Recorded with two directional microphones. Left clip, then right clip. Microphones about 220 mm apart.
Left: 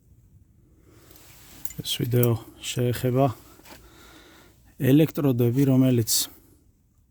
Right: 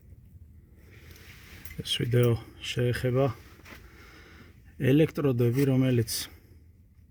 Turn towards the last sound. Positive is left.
turn(degrees=40)  # may be behind; listen again after turning